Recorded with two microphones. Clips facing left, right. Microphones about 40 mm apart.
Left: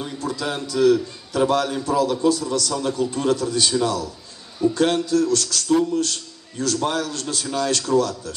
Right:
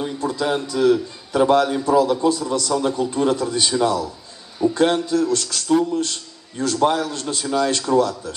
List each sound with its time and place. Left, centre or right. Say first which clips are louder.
0.2 s a man's voice: right 4 dB; right